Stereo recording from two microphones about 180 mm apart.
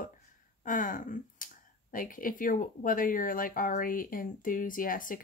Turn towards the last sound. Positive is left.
turn(degrees=50)  # may be behind; listen again after turning